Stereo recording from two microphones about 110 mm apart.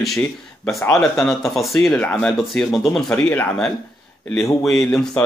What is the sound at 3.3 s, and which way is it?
Speech, 15° left (ahead or behind).